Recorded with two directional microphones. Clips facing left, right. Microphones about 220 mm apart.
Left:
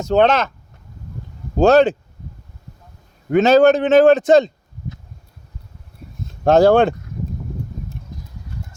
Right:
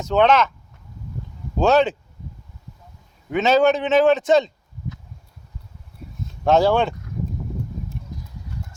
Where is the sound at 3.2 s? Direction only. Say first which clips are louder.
Left 5 dB; 50° left (ahead or behind).